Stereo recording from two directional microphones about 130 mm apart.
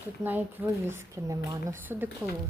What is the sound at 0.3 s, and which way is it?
A woman's voice, 15° right (ahead or behind).